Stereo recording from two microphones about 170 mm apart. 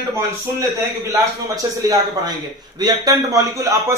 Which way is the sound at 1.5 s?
20° right (ahead or behind).